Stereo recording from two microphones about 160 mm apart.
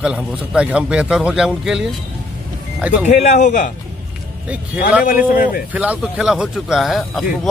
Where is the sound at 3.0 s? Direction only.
50° left (ahead or behind).